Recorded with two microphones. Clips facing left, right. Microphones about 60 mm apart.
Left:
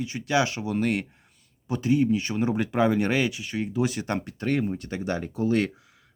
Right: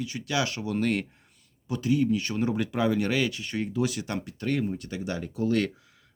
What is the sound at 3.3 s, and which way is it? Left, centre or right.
Speech, centre.